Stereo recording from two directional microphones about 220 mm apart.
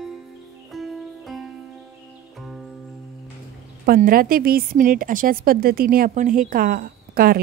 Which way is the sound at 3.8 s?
40° right (ahead or behind).